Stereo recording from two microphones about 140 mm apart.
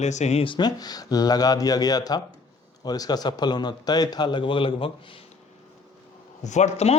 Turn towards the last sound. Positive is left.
turn(degrees=50)  # may be behind; listen again after turning